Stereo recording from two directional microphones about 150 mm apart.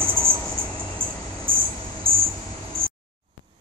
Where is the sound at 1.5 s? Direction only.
35° right (ahead or behind).